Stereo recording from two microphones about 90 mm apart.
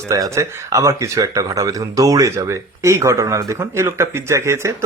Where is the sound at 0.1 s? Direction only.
40° right (ahead or behind).